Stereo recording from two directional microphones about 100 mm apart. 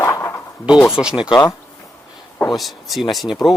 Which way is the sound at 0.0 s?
30° left (ahead or behind).